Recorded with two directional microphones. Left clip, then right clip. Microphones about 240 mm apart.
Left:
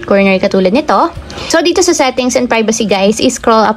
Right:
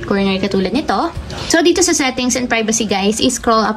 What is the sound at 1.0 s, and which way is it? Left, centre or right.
A woman's voice, left.